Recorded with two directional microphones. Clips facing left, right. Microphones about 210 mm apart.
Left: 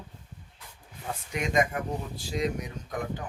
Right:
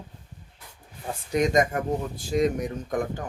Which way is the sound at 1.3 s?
40° right (ahead or behind).